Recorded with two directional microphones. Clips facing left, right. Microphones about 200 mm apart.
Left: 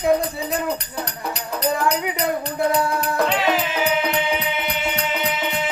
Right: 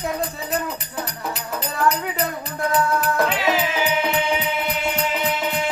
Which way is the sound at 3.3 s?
Centre (ahead or behind).